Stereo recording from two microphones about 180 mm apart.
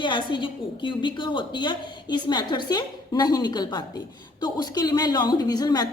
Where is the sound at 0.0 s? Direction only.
25° left (ahead or behind).